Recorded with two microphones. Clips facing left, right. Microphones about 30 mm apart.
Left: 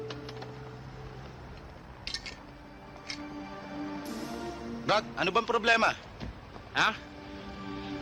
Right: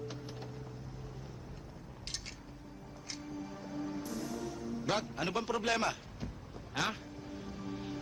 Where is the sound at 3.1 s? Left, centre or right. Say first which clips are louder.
Left 3 dB; left.